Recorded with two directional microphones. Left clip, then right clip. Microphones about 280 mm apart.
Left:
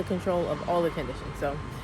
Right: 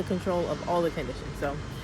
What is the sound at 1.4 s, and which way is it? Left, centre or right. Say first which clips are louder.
Speech: left 1 dB; centre.